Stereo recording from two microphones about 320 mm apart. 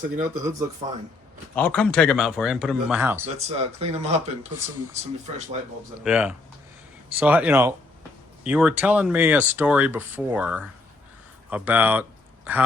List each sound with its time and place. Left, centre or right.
0.0 s speech: right
1.5 s speech: centre
3.2 s speech: centre
6.0 s speech: centre